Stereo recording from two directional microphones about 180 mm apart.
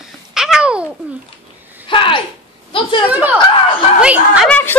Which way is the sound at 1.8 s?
30° left (ahead or behind).